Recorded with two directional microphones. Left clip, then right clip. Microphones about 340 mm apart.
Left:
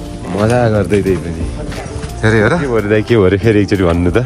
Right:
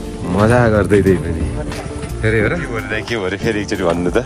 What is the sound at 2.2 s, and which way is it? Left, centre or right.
Speech, centre.